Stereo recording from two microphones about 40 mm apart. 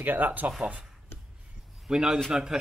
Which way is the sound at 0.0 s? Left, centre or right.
Right.